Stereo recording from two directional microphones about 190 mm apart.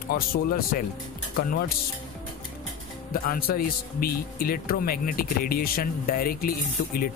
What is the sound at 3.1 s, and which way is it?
Speech, 50° left (ahead or behind).